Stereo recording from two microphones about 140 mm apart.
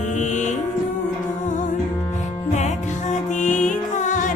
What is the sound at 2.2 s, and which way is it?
Music, 55° left (ahead or behind).